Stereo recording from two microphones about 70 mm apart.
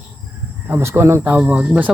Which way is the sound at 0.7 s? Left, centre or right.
Right.